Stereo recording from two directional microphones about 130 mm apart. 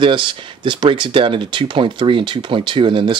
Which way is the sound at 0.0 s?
40° right (ahead or behind).